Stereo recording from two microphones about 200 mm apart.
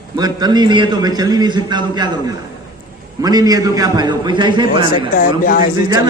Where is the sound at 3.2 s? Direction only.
20° right (ahead or behind).